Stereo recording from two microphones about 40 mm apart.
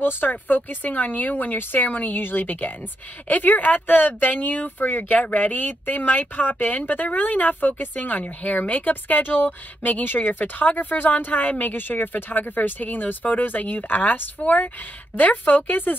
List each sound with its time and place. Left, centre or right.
0.0 s speech: left